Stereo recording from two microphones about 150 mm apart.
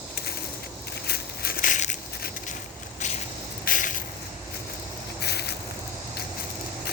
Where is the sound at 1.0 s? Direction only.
90° left; by 1.9 s 60° left (ahead or behind).